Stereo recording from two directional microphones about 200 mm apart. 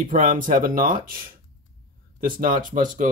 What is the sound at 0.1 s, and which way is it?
Speech, 40° right (ahead or behind).